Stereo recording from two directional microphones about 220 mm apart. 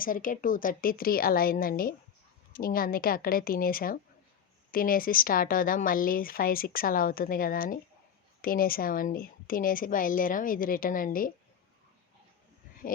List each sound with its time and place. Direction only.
0.0 s speech: 40° left (ahead or behind)